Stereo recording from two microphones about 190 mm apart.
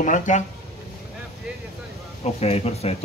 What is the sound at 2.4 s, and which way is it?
Speech, 35° left (ahead or behind).